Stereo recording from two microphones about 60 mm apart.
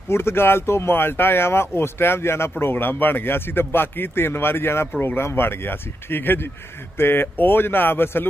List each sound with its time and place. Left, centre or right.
0.1 s a man's voice: left